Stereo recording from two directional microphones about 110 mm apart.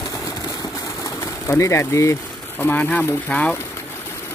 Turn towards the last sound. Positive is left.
turn(degrees=10)  # may be behind; listen again after turning